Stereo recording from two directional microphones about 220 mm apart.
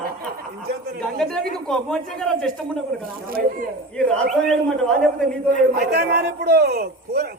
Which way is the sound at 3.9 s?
Centre (ahead or behind).